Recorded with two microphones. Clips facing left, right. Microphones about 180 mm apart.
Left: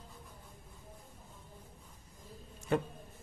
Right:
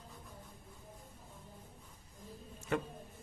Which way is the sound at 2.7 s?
35° left (ahead or behind).